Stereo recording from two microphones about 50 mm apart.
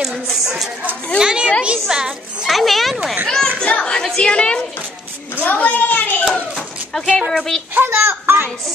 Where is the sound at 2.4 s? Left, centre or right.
Centre.